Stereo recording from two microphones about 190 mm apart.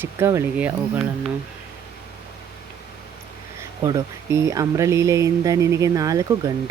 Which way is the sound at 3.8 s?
20° right (ahead or behind).